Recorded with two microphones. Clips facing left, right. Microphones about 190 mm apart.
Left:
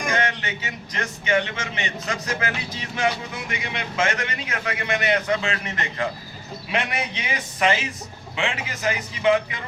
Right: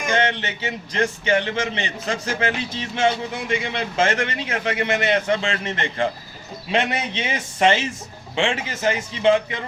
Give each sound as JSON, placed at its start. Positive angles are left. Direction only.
{"t": 0.1, "sound": "a man's voice", "side_deg": -25}
{"t": 3.5, "sound": "a man's voice", "side_deg": -30}